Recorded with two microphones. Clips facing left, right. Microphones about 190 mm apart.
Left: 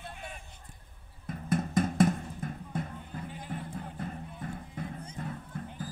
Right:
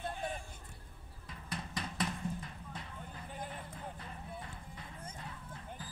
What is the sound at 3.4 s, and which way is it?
Music, 50° left (ahead or behind).